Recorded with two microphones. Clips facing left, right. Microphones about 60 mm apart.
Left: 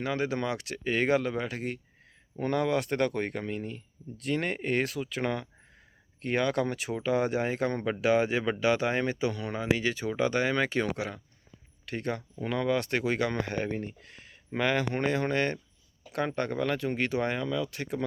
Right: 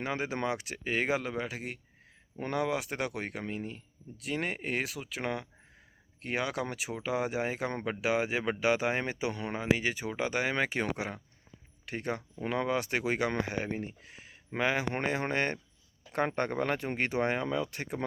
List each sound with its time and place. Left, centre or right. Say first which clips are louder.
0.0 s speech: left 3 dB; right
0.9 s speech: left 4 dB; centre; by 18.0 s right